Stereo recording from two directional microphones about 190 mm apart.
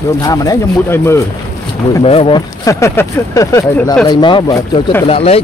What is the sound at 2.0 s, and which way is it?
Speech, 30° left (ahead or behind).